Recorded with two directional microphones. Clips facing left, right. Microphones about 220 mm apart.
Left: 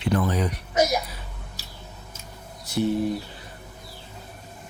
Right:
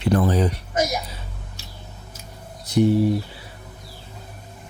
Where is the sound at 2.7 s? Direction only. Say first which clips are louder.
Right 6 dB; 15° right (ahead or behind).